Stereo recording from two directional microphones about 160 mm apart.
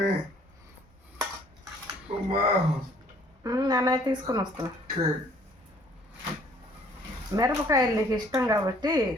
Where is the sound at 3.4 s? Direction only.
20° right (ahead or behind).